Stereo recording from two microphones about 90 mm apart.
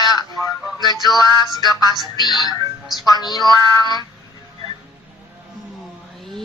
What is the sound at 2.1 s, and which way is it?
Speech, 50° left (ahead or behind).